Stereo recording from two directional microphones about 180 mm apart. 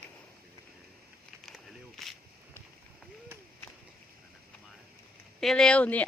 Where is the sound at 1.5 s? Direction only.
Centre (ahead or behind).